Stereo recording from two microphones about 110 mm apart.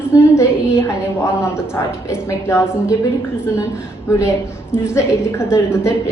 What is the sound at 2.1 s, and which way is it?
Speech, 25° left (ahead or behind).